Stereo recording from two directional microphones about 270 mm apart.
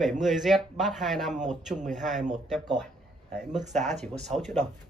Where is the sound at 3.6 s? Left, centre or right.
Right.